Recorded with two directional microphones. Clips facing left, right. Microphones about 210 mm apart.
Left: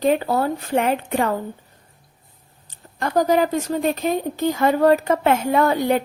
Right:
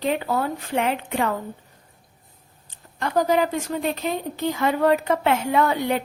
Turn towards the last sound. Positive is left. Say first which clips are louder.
# left 3 dB
turn(degrees=40)  # may be behind; listen again after turning